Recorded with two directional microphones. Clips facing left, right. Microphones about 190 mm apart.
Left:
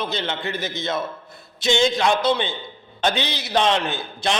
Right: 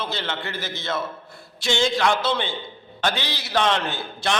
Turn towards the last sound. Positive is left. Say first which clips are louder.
# left 1 dB
turn(degrees=20)  # may be behind; listen again after turning